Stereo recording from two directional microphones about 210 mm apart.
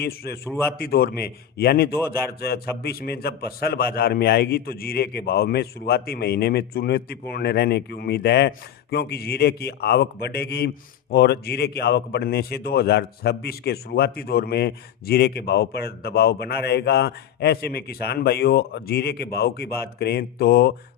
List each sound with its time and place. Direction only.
0.0 s a man's voice: 50° left (ahead or behind)